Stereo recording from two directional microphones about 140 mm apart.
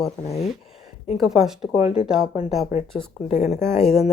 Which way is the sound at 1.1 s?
Centre (ahead or behind).